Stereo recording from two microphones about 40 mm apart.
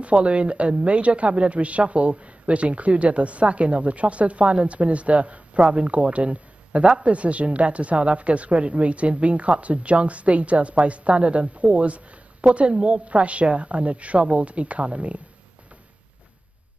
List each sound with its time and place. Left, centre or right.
0.0 s a woman's voice: right